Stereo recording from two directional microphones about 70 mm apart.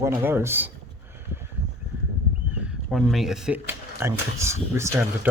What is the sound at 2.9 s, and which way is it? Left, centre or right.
Speech, centre.